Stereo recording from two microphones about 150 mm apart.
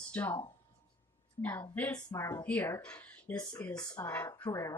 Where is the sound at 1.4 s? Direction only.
10° left (ahead or behind).